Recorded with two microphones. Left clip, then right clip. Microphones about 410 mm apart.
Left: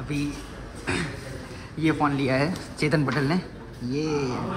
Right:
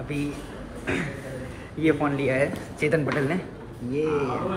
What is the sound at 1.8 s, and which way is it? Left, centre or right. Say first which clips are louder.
A man's voice: right 1 dB; centre.